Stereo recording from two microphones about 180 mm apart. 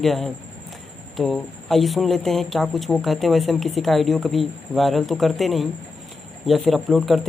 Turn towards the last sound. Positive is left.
turn(degrees=0)  # may be behind; listen again after turning